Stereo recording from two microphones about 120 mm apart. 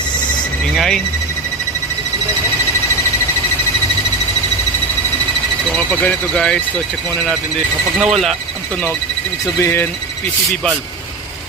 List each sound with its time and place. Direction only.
0.8 s speech: 5° left (ahead or behind)
5.7 s speech: 10° left (ahead or behind)
7.9 s speech: centre (ahead or behind)
9.6 s speech: 20° left (ahead or behind)
10.5 s speech: 5° left (ahead or behind)